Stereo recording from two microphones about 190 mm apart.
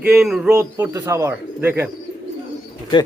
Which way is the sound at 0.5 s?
15° right (ahead or behind).